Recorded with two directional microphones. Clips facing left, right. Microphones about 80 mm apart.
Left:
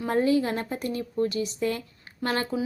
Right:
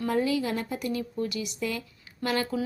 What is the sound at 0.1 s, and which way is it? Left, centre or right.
Speech, left.